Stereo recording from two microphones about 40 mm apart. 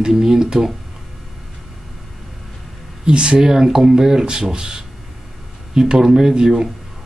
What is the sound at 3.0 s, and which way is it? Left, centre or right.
Speech, right.